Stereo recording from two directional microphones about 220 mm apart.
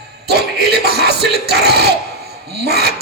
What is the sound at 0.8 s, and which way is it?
Music, 45° right (ahead or behind).